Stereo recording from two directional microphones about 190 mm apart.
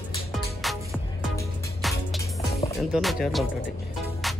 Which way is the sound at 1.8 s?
Centre (ahead or behind).